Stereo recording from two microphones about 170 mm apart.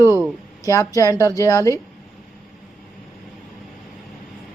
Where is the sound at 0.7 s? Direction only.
20° left (ahead or behind).